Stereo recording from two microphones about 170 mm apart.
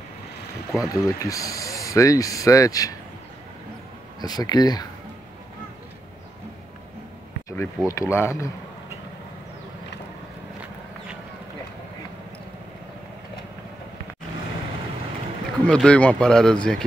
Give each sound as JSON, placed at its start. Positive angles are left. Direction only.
{"t": 0.7, "sound": "speech", "side_deg": 20}
{"t": 4.2, "sound": "speech", "side_deg": 25}
{"t": 7.4, "sound": "a sound", "side_deg": 15}
{"t": 7.9, "sound": "speech", "side_deg": 15}
{"t": 15.6, "sound": "speech", "side_deg": 5}